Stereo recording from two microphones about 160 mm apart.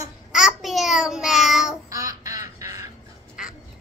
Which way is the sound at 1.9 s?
20° right (ahead or behind).